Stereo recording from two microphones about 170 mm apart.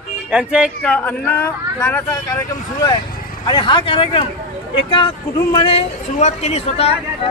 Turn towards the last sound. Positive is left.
turn(degrees=40)  # may be behind; listen again after turning